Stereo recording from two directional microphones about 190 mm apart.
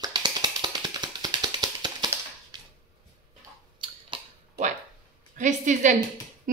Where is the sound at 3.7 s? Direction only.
25° right (ahead or behind).